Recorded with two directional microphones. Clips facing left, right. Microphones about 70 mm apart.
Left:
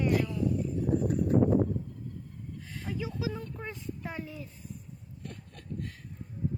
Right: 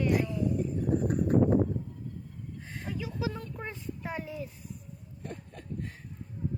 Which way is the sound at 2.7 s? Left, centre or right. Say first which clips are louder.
Even; right.